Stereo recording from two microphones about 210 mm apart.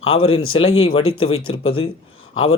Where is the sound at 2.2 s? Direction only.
75° left (ahead or behind).